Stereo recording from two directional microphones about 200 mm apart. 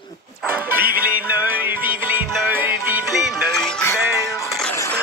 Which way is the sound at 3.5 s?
5° left (ahead or behind).